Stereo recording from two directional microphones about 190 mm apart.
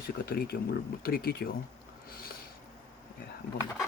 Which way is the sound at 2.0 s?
50° left (ahead or behind).